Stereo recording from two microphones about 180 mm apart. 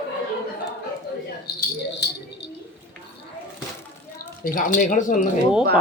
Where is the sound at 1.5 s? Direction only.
60° left (ahead or behind).